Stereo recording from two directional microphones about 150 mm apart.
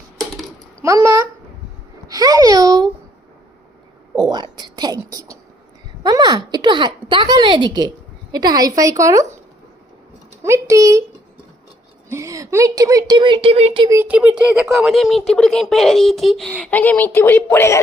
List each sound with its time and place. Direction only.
0.2 s typing: centre (ahead or behind)
0.8 s a sound: 20° right (ahead or behind)
4.1 s a sound: 30° right (ahead or behind)
8.3 s speech: 25° right (ahead or behind)
10.4 s speech: 20° right (ahead or behind)
12.0 s a woman's voice: 20° right (ahead or behind); by 13.8 s 40° right (ahead or behind)
13.9 s speech: 10° right (ahead or behind); by 17.7 s 15° left (ahead or behind)